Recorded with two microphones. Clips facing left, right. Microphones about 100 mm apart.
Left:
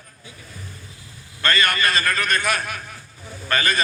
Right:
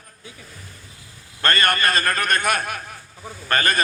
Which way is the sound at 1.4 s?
50° right (ahead or behind).